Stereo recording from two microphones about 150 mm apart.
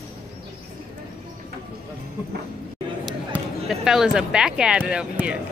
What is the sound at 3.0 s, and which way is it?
Speech, 5° right (ahead or behind).